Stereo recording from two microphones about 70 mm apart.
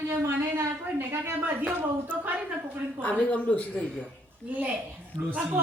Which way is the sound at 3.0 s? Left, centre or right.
Centre.